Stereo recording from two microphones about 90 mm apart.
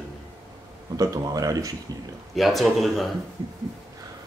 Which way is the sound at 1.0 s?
45° right (ahead or behind).